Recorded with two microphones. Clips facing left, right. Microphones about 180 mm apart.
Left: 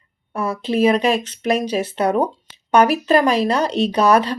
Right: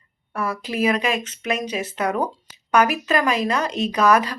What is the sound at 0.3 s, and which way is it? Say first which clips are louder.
A woman's voice: left 5 dB; 25° left (ahead or behind).